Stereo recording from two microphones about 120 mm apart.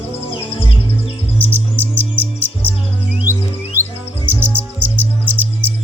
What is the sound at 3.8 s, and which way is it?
Chirp, 15° right (ahead or behind).